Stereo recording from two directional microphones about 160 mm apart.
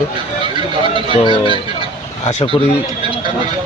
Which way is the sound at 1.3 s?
30° right (ahead or behind).